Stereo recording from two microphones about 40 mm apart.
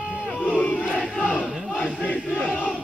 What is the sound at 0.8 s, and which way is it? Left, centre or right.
Crowd, centre.